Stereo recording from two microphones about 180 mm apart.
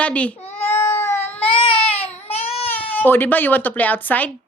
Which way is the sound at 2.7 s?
10° left (ahead or behind).